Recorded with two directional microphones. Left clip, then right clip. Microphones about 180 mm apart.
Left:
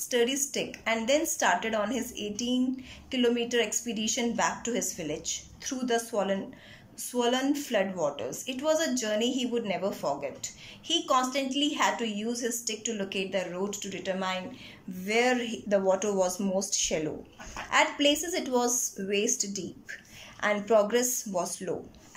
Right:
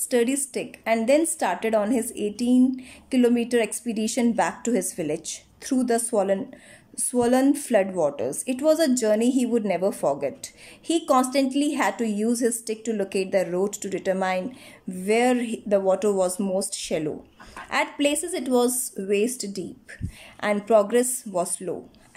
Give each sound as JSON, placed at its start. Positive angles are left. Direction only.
{"t": 0.1, "sound": "a woman's voice", "side_deg": -25}